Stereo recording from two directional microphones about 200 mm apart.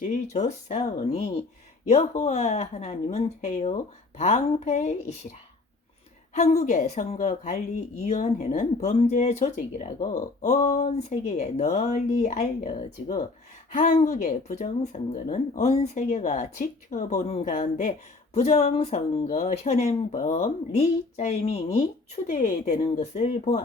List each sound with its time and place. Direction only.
0.0 s speech: 35° left (ahead or behind)
6.3 s speech: 35° left (ahead or behind)
13.7 s speech: 40° left (ahead or behind)